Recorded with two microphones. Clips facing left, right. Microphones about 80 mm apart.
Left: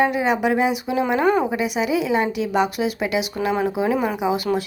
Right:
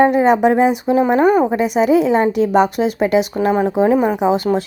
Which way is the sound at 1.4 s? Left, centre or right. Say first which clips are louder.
Right 7 dB; right.